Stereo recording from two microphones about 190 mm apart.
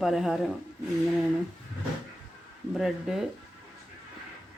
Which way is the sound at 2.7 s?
5° right (ahead or behind).